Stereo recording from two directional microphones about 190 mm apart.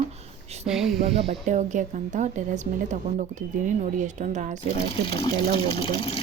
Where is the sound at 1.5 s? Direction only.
40° right (ahead or behind).